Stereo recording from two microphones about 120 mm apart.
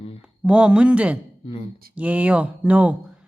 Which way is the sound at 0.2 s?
10° right (ahead or behind).